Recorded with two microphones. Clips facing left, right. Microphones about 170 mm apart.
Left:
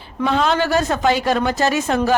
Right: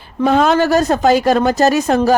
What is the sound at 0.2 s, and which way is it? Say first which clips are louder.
Speech: right 5 dB; 45° right (ahead or behind).